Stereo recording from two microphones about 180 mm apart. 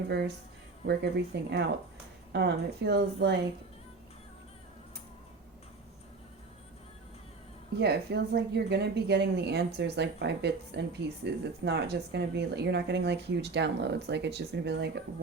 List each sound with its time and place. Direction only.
0.1 s speech: 65° right (ahead or behind)
7.8 s speech: 65° right (ahead or behind)